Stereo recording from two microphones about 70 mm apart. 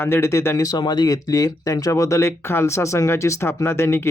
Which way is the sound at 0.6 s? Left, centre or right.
Left.